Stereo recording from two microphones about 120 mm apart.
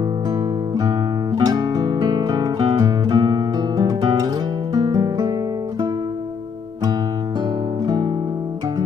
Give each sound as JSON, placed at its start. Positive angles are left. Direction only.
{"t": 0.3, "sound": "guitar", "side_deg": -35}
{"t": 4.7, "sound": "music", "side_deg": -35}
{"t": 7.8, "sound": "guitar", "side_deg": -35}